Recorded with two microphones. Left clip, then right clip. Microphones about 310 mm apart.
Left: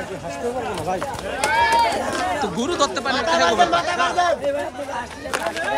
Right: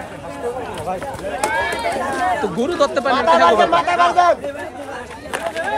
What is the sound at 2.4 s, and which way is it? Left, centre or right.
Speech, centre.